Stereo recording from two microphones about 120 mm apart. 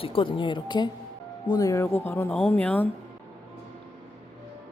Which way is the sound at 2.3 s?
10° left (ahead or behind).